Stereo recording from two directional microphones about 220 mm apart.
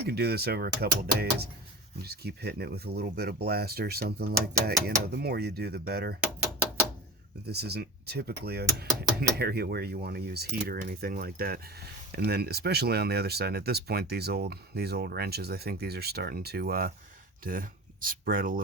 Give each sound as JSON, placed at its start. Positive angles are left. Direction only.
{"t": 0.1, "sound": "speech", "side_deg": -45}
{"t": 7.4, "sound": "speech", "side_deg": -45}